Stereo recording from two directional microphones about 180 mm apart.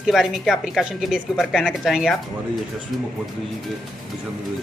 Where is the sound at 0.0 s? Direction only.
Centre (ahead or behind).